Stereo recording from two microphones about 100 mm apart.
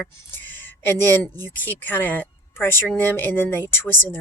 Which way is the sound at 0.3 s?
20° left (ahead or behind).